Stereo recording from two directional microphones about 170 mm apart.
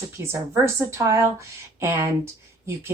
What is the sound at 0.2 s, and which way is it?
A woman's voice, 15° right (ahead or behind).